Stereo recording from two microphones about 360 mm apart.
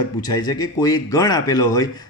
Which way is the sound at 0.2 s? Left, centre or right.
Centre.